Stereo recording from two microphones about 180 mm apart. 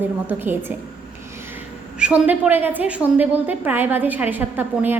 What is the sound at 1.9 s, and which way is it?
A woman's voice, 5° right (ahead or behind).